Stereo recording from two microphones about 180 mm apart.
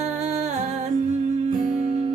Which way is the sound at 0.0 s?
40° right (ahead or behind).